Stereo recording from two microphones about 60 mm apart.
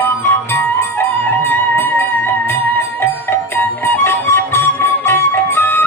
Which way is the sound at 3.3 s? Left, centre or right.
Left.